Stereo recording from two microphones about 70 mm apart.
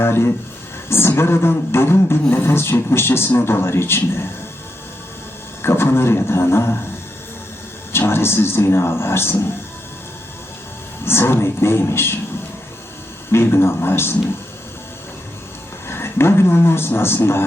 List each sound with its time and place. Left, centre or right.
0.0 s a man's voice: left
5.6 s a man's voice: left
7.9 s a man's voice: left
11.0 s a man's voice: left
13.3 s a man's voice: left
15.9 s a man's voice: left